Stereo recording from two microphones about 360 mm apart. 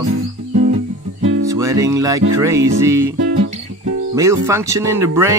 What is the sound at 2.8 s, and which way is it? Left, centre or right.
Speech, centre.